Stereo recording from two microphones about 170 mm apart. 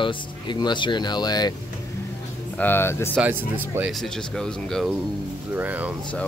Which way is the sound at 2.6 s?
15° left (ahead or behind).